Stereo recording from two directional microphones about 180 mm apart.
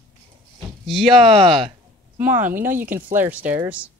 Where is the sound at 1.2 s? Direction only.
30° right (ahead or behind).